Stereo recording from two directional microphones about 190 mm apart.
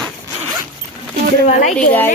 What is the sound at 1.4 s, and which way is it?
Speech, 35° left (ahead or behind).